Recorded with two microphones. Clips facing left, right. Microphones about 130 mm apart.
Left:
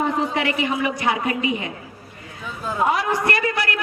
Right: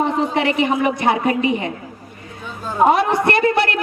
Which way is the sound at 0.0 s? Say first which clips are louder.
Right 3 dB; 25° right (ahead or behind).